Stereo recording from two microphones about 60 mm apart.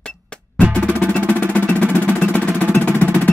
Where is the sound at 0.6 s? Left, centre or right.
Left.